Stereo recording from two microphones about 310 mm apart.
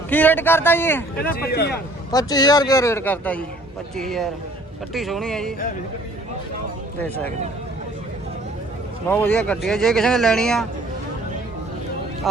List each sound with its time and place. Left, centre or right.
0.1 s speech: centre
1.4 s speech: left
2.1 s speech: centre
9.0 s speech: centre